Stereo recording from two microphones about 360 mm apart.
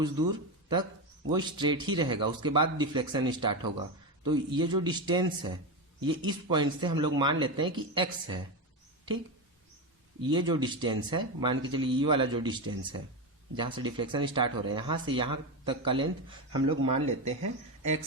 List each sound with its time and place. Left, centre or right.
1.3 s speech: centre
10.2 s speech: centre